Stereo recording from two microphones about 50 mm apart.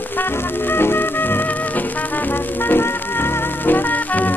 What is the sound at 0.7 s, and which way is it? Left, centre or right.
Music, left.